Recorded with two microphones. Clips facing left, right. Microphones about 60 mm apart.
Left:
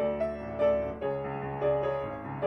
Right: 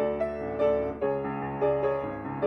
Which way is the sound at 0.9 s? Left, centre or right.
Right.